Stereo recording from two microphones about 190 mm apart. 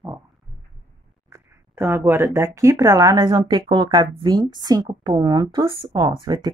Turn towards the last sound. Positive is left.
turn(degrees=-25)  # may be behind; listen again after turning